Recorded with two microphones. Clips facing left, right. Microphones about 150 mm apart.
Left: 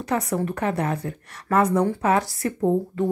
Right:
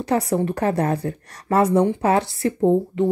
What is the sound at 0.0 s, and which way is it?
A woman's voice, 30° right (ahead or behind).